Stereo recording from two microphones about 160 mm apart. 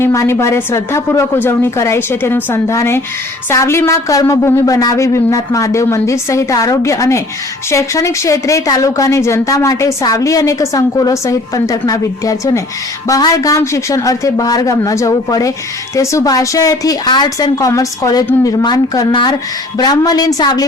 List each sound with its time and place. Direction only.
0.0 s a woman's voice: 15° left (ahead or behind)